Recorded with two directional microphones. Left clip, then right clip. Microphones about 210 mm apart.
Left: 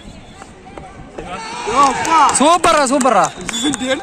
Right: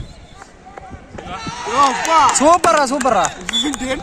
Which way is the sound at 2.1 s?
50° right (ahead or behind).